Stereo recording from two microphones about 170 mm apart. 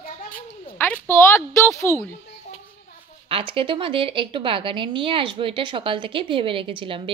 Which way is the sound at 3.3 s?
30° right (ahead or behind).